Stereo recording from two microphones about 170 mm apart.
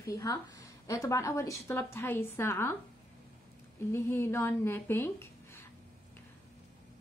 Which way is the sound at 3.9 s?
15° left (ahead or behind).